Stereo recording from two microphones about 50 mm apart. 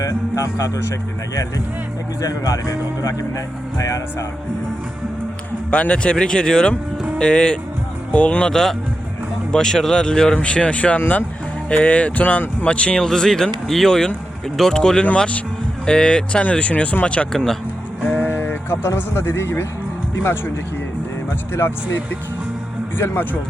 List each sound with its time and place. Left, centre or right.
0.3 s speech: left
5.7 s speech: left
8.4 s speech: centre; by 17.2 s left
17.3 s speech: centre
18.0 s speech: left
21.5 s speech: left